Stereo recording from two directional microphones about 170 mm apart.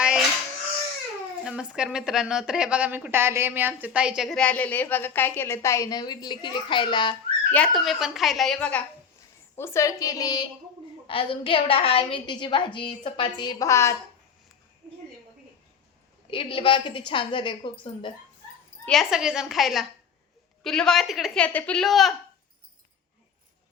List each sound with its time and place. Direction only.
0.0 s a sound: 5° right (ahead or behind)
1.5 s a woman's voice: 5° right (ahead or behind); by 7.2 s 25° left (ahead or behind)
7.5 s a woman's voice: 5° left (ahead or behind)
16.3 s a woman's voice: 30° left (ahead or behind)
18.9 s a woman's voice: centre (ahead or behind)